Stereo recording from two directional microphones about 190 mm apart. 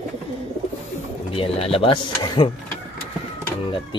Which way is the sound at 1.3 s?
30° left (ahead or behind).